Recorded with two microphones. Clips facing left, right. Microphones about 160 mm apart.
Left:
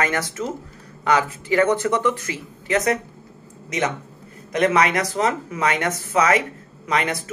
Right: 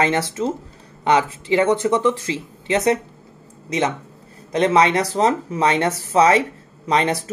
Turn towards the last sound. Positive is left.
turn(degrees=-30)  # may be behind; listen again after turning